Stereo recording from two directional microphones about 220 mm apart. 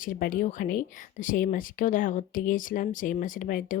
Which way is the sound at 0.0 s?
40° left (ahead or behind).